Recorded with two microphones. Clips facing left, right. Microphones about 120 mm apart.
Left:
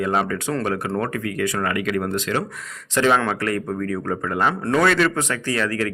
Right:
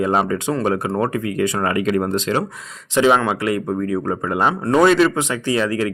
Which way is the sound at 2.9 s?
15° right (ahead or behind).